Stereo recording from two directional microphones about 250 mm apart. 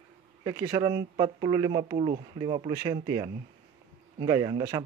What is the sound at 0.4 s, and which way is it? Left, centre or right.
Speech, centre.